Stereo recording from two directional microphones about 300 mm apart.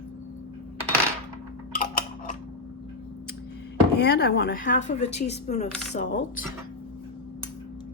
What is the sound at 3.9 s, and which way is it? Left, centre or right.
A woman's voice, left.